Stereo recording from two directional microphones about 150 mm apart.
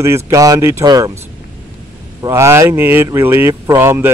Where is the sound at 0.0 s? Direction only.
20° right (ahead or behind).